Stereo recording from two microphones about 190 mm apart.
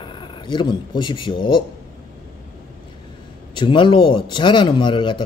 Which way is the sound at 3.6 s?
25° left (ahead or behind).